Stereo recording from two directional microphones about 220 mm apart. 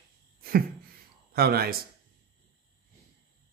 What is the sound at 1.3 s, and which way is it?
Speech, 45° right (ahead or behind).